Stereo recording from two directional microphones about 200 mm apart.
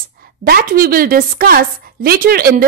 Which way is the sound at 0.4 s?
45° right (ahead or behind).